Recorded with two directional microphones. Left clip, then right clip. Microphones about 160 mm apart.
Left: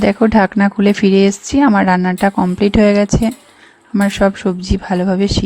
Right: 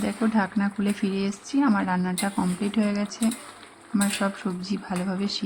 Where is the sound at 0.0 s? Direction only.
60° left (ahead or behind).